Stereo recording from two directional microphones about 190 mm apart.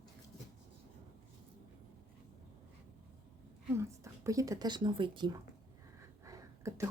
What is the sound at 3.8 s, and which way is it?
Speech, 15° right (ahead or behind).